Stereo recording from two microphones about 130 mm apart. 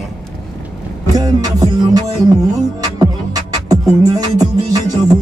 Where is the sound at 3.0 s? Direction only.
30° right (ahead or behind).